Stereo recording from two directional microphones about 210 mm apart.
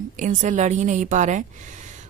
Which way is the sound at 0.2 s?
35° right (ahead or behind).